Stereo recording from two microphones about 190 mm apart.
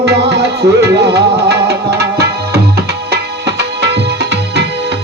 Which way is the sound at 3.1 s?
65° right (ahead or behind).